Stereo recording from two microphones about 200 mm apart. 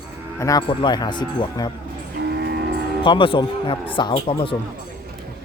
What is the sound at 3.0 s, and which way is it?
Speech, 25° left (ahead or behind).